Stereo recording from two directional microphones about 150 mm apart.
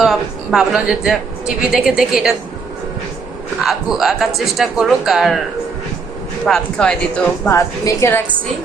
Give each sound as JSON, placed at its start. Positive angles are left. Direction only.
{"t": 0.0, "sound": "speech", "side_deg": 0}
{"t": 3.6, "sound": "speech", "side_deg": 0}
{"t": 6.4, "sound": "speech", "side_deg": 5}
{"t": 7.4, "sound": "a woman's voice", "side_deg": 20}